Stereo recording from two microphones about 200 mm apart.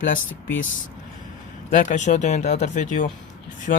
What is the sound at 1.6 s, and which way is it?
Speech, 35° left (ahead or behind).